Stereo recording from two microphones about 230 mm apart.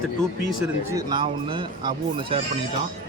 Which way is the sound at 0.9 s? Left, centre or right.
Right.